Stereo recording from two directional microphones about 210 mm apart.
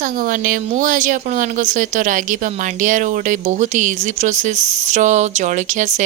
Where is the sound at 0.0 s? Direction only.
40° right (ahead or behind).